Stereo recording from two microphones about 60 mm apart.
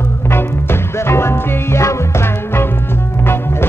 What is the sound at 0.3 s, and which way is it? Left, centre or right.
Music, left.